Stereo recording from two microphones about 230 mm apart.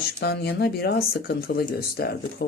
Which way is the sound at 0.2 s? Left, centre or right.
Left.